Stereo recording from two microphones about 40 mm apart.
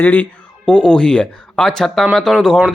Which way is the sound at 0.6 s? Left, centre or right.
Left.